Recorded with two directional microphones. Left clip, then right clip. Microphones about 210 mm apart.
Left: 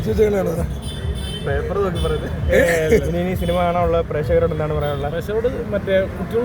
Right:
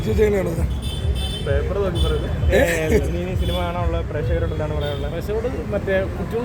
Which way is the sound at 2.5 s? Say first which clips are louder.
Left 3 dB; 15° right (ahead or behind).